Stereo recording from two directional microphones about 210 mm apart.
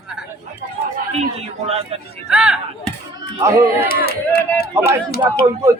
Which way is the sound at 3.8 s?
50° left (ahead or behind).